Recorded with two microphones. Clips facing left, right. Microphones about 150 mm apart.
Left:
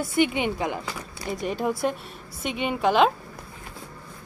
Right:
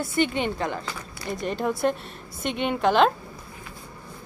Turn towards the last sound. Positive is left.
turn(degrees=5)  # may be behind; listen again after turning